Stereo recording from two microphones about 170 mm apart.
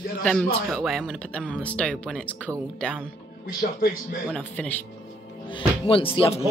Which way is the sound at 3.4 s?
60° left (ahead or behind).